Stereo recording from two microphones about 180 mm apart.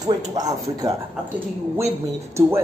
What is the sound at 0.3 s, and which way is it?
Speech, 20° right (ahead or behind).